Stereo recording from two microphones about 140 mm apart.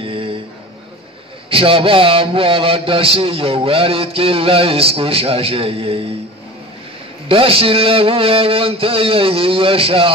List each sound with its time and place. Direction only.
0.0 s a sound: 40° right (ahead or behind)
1.5 s a man's voice: 40° right (ahead or behind)
7.2 s a man's voice: 40° right (ahead or behind)